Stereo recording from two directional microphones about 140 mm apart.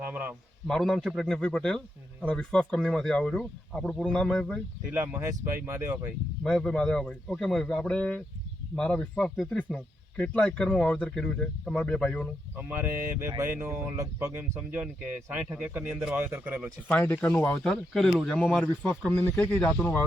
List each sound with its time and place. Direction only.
0.0 s a man's voice: 15° right (ahead or behind)
0.7 s speech: 5° left (ahead or behind)
4.9 s speech: 15° right (ahead or behind)
6.4 s speech: 5° left (ahead or behind)
12.5 s speech: 15° right (ahead or behind)
16.9 s speech: 10° left (ahead or behind)
18.9 s speech: 15° left (ahead or behind)